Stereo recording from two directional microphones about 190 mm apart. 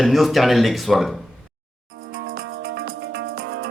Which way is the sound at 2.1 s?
50° right (ahead or behind).